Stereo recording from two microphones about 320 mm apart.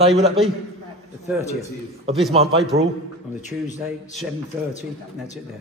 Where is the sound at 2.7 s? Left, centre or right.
Centre.